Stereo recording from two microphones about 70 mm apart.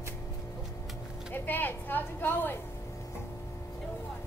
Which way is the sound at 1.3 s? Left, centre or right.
Left.